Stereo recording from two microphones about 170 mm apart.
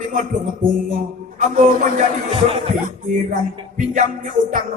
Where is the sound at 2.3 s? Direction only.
35° right (ahead or behind).